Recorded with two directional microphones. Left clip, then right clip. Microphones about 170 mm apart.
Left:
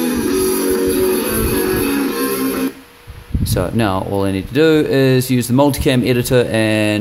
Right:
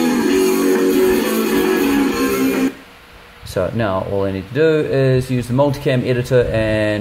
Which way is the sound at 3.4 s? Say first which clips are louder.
Left 1 dB; 30° left (ahead or behind).